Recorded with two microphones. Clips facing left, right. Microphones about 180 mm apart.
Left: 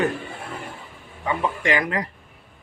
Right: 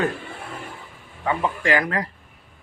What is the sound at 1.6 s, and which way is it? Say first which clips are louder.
Speech: right 2 dB; 20° left (ahead or behind).